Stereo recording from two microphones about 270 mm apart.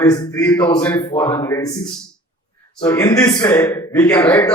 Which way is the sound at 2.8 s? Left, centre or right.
Centre.